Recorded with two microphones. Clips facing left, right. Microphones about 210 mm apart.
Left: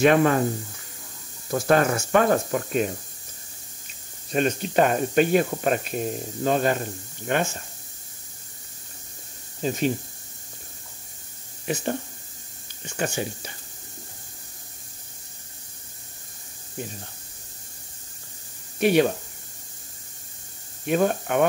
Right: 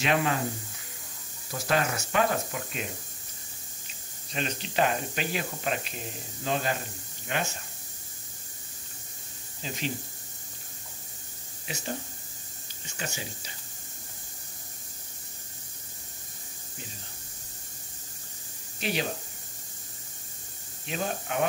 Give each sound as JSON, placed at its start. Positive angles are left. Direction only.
{"t": 0.0, "sound": "speech", "side_deg": 50}
{"t": 1.5, "sound": "speech", "side_deg": 50}
{"t": 4.3, "sound": "speech", "side_deg": 50}
{"t": 9.6, "sound": "speech", "side_deg": 45}
{"t": 11.6, "sound": "speech", "side_deg": 55}
{"t": 18.8, "sound": "speech", "side_deg": 55}
{"t": 20.8, "sound": "speech", "side_deg": 55}